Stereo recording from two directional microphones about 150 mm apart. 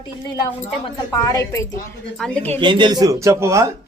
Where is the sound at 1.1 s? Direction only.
25° left (ahead or behind).